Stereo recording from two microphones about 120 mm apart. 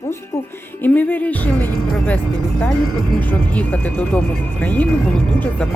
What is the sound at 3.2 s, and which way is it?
Speech, 15° left (ahead or behind).